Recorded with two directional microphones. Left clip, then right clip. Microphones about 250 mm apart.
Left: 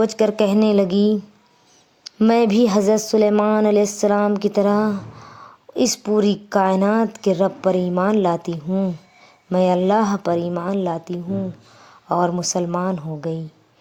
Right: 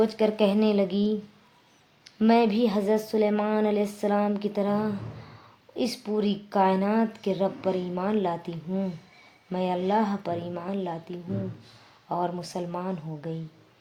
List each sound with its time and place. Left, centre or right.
0.0 s a woman's voice: left